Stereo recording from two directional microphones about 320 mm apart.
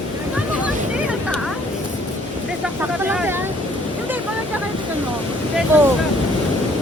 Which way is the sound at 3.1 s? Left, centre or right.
Centre.